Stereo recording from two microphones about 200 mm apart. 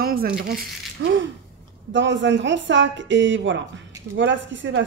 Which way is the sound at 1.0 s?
65° right (ahead or behind).